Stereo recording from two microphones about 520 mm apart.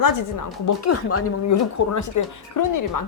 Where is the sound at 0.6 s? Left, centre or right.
Left.